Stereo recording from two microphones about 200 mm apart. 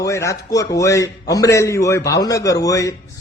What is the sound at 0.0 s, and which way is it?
A man's voice, 15° left (ahead or behind).